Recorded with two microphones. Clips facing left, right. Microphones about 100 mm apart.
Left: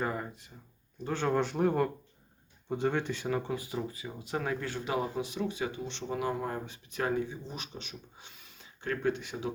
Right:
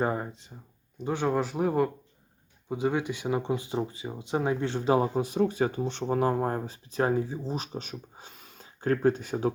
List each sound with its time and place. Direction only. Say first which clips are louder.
0.0 s speech: right 5 dB; 25° right (ahead or behind)